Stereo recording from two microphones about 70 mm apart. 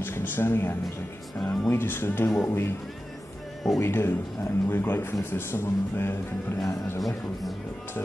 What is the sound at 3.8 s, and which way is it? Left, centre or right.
A man's voice, left.